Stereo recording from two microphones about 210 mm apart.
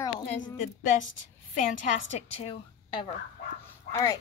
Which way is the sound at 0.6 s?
35° left (ahead or behind).